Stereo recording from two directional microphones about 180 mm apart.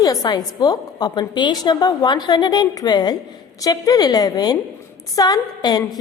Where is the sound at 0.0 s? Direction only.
20° left (ahead or behind).